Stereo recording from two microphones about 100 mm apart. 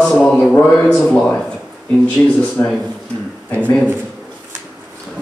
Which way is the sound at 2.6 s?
25° left (ahead or behind).